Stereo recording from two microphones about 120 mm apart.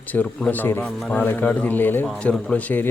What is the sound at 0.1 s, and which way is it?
A man's voice, 15° left (ahead or behind).